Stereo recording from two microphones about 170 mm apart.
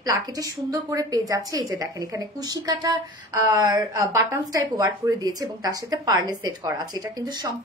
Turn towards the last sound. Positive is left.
turn(degrees=-25)  # may be behind; listen again after turning